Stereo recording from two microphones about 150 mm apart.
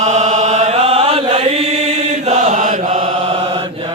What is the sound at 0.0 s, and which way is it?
Chant, 50° right (ahead or behind).